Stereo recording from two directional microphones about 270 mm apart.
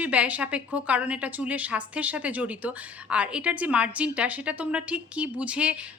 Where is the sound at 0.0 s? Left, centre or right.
Centre.